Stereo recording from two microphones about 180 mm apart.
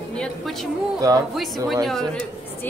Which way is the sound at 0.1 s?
5° left (ahead or behind).